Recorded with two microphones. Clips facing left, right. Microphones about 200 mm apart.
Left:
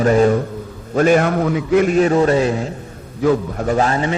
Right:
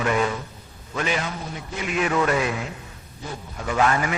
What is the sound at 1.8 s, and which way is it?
Speech, 35° left (ahead or behind).